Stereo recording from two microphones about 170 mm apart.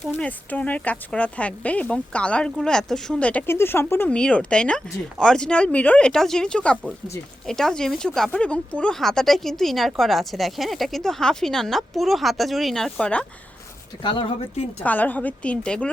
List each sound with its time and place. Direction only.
0.1 s speech: 10° left (ahead or behind)
14.0 s speech: 30° left (ahead or behind)
14.8 s speech: 10° left (ahead or behind)